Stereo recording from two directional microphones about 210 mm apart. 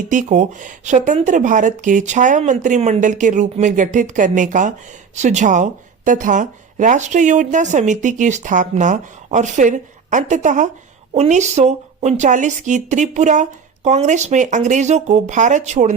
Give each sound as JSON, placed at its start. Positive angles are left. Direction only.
{"t": 0.1, "sound": "speech", "side_deg": -35}